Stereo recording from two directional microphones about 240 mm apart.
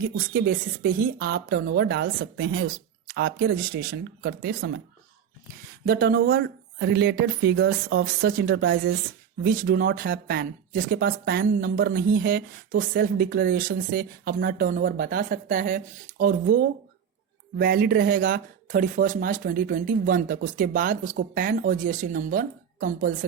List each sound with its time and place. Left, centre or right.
0.0 s speech: right
5.8 s speech: right